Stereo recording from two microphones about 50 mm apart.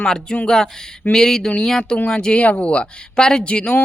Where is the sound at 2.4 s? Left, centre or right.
Left.